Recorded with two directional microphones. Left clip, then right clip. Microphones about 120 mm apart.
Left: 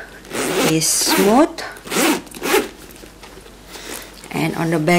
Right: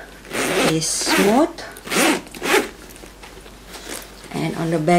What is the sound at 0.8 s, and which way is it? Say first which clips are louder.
Speech: left 2 dB; 40° left (ahead or behind).